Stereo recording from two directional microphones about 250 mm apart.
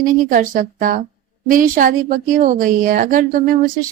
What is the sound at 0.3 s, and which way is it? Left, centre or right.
A woman's voice, right.